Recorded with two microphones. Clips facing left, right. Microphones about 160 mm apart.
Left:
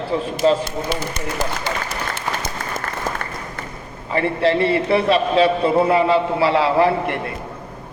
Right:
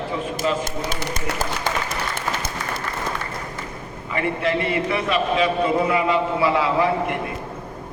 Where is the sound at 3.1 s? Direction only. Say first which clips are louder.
Left 3 dB; 45° left (ahead or behind).